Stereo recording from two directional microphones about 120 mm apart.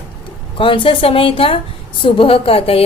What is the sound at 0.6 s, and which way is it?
A woman's voice, 45° left (ahead or behind).